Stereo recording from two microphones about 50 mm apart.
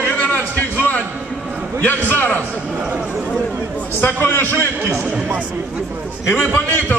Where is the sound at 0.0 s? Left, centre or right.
Left.